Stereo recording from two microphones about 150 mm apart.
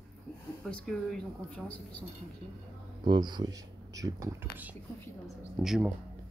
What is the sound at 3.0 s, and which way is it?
Speech, 30° right (ahead or behind).